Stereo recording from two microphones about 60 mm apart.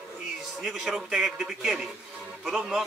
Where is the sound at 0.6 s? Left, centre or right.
Centre.